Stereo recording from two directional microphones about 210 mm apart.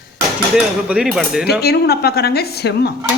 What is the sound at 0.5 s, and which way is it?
Speech, 5° right (ahead or behind).